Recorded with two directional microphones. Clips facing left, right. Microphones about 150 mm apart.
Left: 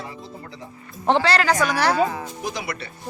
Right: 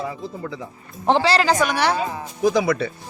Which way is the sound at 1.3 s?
30° right (ahead or behind).